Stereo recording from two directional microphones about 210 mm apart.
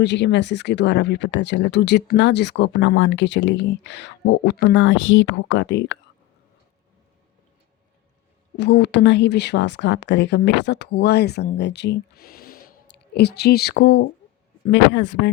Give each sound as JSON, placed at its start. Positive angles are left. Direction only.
{"t": 0.0, "sound": "speech", "side_deg": 55}
{"t": 8.5, "sound": "speech", "side_deg": 55}